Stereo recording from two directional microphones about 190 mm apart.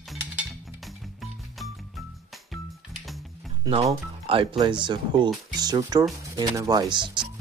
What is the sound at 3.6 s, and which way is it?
Speech, 30° right (ahead or behind).